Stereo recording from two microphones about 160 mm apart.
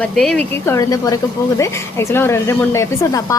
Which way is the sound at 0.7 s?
20° left (ahead or behind).